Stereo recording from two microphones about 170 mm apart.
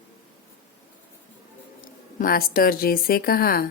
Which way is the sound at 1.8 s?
55° left (ahead or behind).